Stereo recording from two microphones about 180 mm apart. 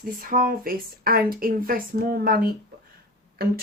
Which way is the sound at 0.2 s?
50° right (ahead or behind).